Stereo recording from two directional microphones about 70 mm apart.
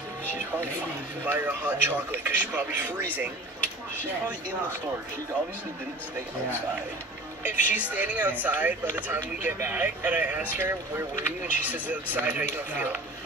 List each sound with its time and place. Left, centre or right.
1.2 s speech: right
7.4 s speech: right